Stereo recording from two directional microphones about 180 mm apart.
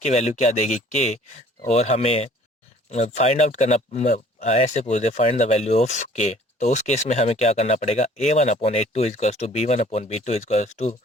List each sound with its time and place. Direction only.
0.0 s speech: 40° left (ahead or behind)